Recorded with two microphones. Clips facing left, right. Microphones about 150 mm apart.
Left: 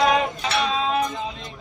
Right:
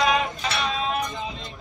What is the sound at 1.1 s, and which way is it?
Music, centre (ahead or behind).